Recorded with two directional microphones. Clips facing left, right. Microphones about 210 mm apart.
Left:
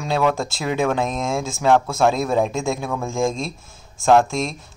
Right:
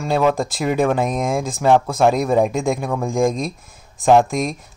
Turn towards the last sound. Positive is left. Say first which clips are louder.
# right 2 dB
turn(degrees=-15)  # may be behind; listen again after turning